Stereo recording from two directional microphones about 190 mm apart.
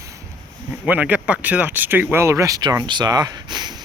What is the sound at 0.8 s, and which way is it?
Speech, 10° right (ahead or behind).